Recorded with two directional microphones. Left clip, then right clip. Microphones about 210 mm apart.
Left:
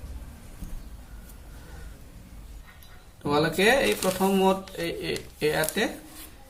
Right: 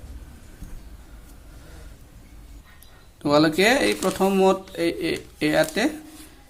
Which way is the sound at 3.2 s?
45° right (ahead or behind).